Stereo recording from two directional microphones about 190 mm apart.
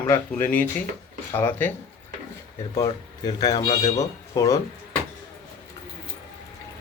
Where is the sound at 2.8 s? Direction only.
20° left (ahead or behind).